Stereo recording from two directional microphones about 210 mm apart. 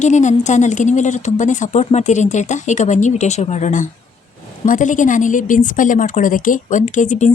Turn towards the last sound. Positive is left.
turn(degrees=35)  # may be behind; listen again after turning